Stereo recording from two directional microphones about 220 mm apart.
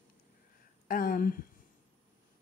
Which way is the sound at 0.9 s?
40° left (ahead or behind).